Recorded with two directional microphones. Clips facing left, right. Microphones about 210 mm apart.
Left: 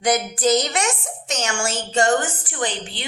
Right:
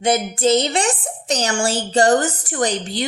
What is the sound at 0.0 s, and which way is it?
A woman's voice, 25° right (ahead or behind).